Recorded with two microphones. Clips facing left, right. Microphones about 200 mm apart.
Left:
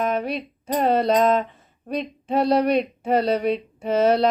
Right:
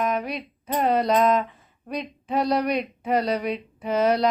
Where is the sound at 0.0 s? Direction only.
30° left (ahead or behind).